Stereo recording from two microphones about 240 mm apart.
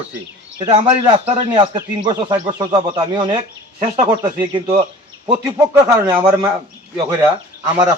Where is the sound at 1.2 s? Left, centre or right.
Centre.